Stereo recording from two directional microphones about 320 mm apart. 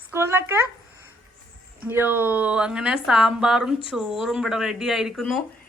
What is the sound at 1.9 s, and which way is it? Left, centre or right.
Speech, centre.